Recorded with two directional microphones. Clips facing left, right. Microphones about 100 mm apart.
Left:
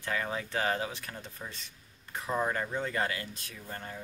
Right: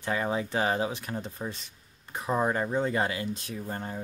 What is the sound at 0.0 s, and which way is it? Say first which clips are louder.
Speech: right 5 dB; 25° right (ahead or behind).